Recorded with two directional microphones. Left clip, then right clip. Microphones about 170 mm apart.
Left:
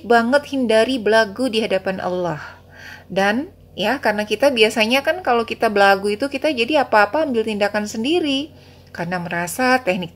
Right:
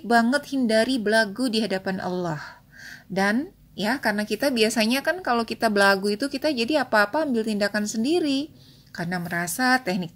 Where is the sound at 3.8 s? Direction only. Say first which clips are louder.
Left 6 dB; 35° right (ahead or behind).